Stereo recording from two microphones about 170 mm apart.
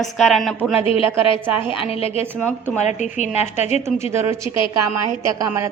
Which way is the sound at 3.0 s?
45° left (ahead or behind).